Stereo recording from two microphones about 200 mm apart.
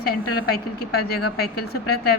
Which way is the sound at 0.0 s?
50° left (ahead or behind).